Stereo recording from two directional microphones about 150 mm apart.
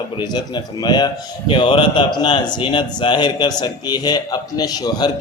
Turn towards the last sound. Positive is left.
turn(degrees=25)  # may be behind; listen again after turning